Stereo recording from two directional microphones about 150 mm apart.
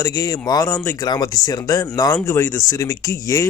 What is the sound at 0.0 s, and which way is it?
Speech, 25° left (ahead or behind).